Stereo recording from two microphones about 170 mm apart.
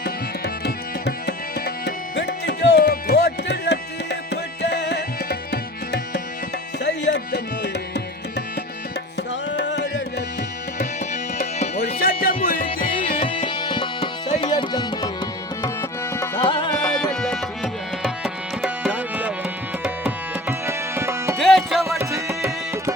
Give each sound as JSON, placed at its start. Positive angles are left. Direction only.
{"t": 0.0, "sound": "tabla", "side_deg": 75}
{"t": 6.8, "sound": "music", "side_deg": 90}
{"t": 7.3, "sound": "tabla", "side_deg": 80}
{"t": 9.5, "sound": "music", "side_deg": 85}
{"t": 10.8, "sound": "tabla", "side_deg": 45}
{"t": 11.9, "sound": "music", "side_deg": 60}
{"t": 12.9, "sound": "music", "side_deg": 30}
{"t": 14.4, "sound": "tabla", "side_deg": 25}
{"t": 16.5, "sound": "tabla", "side_deg": 30}
{"t": 16.8, "sound": "tabla", "side_deg": 5}
{"t": 21.3, "sound": "music", "side_deg": 0}
{"t": 22.3, "sound": "tabla", "side_deg": -5}